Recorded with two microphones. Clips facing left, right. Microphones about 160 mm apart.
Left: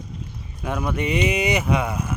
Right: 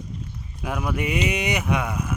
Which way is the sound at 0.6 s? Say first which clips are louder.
Left 2 dB; 5° right (ahead or behind).